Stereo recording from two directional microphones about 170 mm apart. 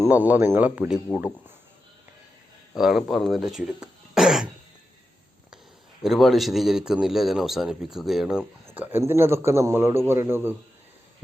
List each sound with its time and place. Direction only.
0.0 s speech: 10° right (ahead or behind)
2.7 s speech: centre (ahead or behind)
6.0 s a man's voice: centre (ahead or behind)